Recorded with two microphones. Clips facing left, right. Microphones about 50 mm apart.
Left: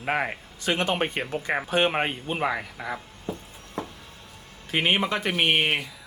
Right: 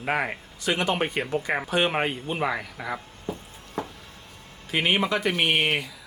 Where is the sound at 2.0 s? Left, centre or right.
Centre.